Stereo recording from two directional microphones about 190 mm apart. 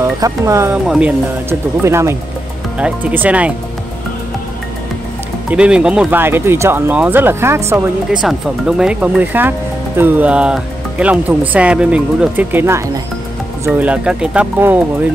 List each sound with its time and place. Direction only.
0.2 s speech: 15° right (ahead or behind)
5.5 s speech: 5° right (ahead or behind)